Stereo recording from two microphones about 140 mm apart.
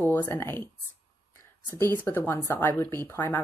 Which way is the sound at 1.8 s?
15° left (ahead or behind).